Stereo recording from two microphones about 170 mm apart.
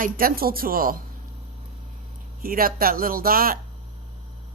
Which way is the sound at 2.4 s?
55° right (ahead or behind).